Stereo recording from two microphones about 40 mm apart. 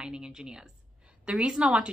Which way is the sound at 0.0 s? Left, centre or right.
Centre.